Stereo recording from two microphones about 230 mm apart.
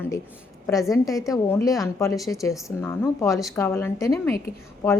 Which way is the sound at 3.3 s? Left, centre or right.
Centre.